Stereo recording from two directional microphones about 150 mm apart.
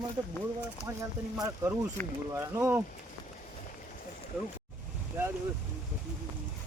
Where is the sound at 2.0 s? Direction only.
15° left (ahead or behind).